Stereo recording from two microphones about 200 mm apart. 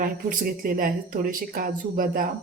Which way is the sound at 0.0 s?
45° right (ahead or behind).